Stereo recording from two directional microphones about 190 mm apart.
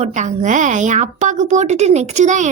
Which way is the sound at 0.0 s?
40° right (ahead or behind).